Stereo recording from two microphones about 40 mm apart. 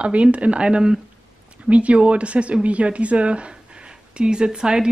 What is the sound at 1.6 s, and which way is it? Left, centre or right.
Speech, right.